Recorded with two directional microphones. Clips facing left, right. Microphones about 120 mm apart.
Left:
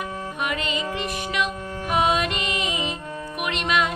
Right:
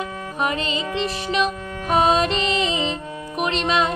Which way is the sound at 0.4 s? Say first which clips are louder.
Right 4 dB; 30° right (ahead or behind).